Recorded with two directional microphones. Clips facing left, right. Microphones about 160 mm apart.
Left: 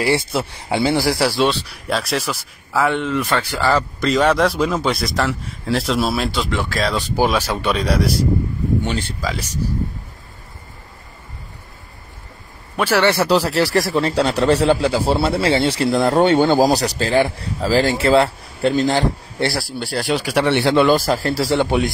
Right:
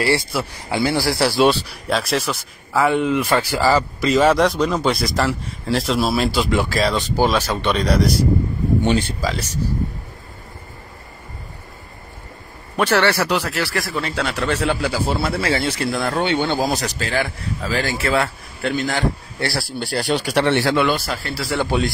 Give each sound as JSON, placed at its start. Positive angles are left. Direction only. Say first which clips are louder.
{"t": 0.0, "sound": "speech", "louder": "left 1 dB", "side_deg": 20}
{"t": 1.1, "sound": "speech", "louder": "right 2 dB", "side_deg": -5}
{"t": 6.5, "sound": "speech", "louder": "right 3 dB", "side_deg": -10}
{"t": 6.8, "sound": "speech", "louder": "right 1 dB", "side_deg": 0}
{"t": 7.2, "sound": "speech", "louder": "left 1 dB", "side_deg": 10}
{"t": 12.7, "sound": "a man's voice", "louder": "even", "side_deg": 10}
{"t": 13.0, "sound": "speech", "louder": "left 3 dB", "side_deg": 25}
{"t": 19.8, "sound": "speech", "louder": "even", "side_deg": 0}
{"t": 20.7, "sound": "speech", "louder": "left 5 dB", "side_deg": 40}
{"t": 21.5, "sound": "speech", "louder": "left 1 dB", "side_deg": 20}